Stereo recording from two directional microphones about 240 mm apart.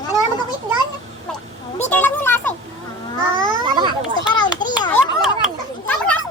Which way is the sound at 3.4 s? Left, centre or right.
Centre.